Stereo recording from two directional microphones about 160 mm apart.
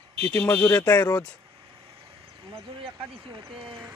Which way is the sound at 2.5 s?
35° right (ahead or behind).